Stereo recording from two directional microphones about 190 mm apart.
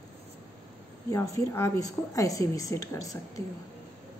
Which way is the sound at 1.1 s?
15° left (ahead or behind).